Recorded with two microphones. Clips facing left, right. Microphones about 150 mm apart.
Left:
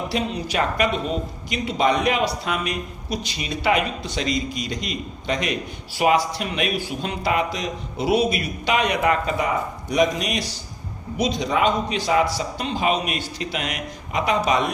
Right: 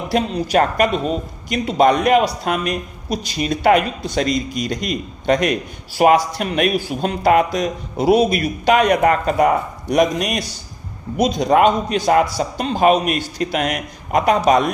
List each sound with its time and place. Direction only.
0.1 s speech: 45° right (ahead or behind)